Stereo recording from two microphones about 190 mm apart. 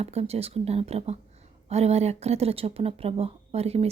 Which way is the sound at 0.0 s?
35° right (ahead or behind).